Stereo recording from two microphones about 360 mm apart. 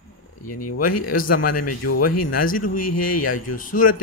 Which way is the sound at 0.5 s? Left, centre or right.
Left.